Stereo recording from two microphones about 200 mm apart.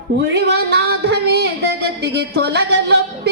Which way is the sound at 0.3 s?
55° right (ahead or behind).